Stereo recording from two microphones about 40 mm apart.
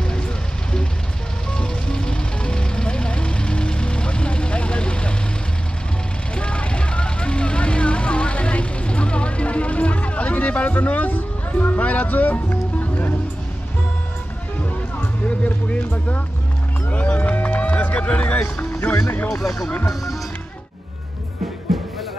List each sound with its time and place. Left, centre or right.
0.0 s vehicle: centre
1.5 s vehicle: centre
6.3 s vehicle: left
10.9 s music: left
15.2 s music: left
19.2 s music: centre
21.7 s music: centre